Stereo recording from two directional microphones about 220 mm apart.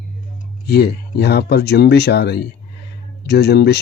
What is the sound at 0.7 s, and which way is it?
Speech, 45° left (ahead or behind).